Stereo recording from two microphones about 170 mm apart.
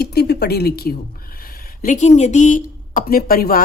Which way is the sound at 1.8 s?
45° left (ahead or behind).